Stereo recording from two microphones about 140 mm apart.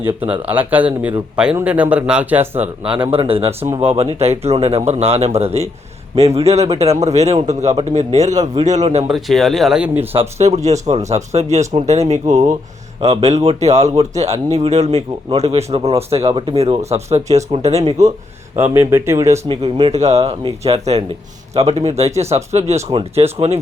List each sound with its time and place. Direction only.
0.0 s speech: 10° right (ahead or behind)
2.8 s speech: 40° right (ahead or behind); by 9.0 s 55° right (ahead or behind)
9.0 s speech: centre (ahead or behind)
10.2 s speech: 50° right (ahead or behind)
18.5 s speech: 15° right (ahead or behind)
19.5 s speech: 40° right (ahead or behind)
19.9 s speech: 50° right (ahead or behind)
22.9 s speech: 40° right (ahead or behind)